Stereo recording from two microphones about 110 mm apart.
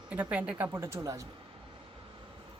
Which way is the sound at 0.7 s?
25° right (ahead or behind).